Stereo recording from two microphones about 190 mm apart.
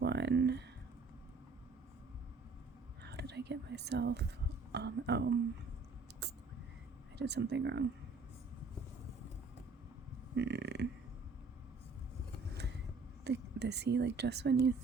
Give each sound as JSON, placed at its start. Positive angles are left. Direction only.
{"t": 0.0, "sound": "a sound", "side_deg": -60}
{"t": 3.0, "sound": "a woman's voice", "side_deg": -60}
{"t": 7.2, "sound": "a woman's voice", "side_deg": -60}
{"t": 10.3, "sound": "speech", "side_deg": -65}
{"t": 13.2, "sound": "a woman's voice", "side_deg": -60}